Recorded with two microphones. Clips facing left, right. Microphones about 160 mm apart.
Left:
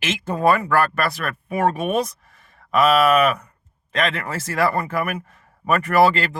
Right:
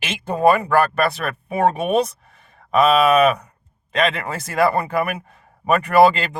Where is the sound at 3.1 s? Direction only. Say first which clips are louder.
Right 2 dB; 20° right (ahead or behind).